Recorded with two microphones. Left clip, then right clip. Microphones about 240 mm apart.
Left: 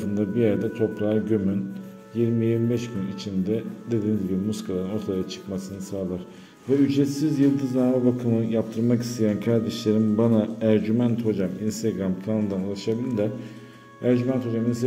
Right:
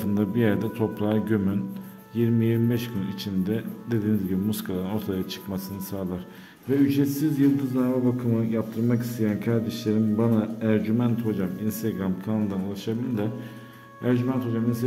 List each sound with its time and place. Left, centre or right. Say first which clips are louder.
0.0 s speech: left 1 dB; centre
6.9 s a man's voice: left 1 dB; centre